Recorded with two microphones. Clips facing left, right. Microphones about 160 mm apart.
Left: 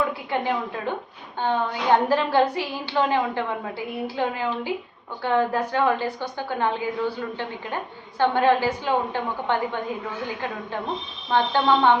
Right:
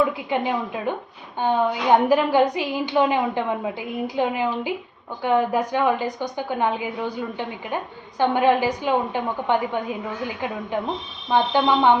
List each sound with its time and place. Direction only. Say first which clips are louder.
0.3 s a woman's voice: right 2 dB; 15° right (ahead or behind)
8.2 s a woman's voice: right 1 dB; 15° right (ahead or behind)
11.3 s a woman's voice: right 1 dB; 15° right (ahead or behind)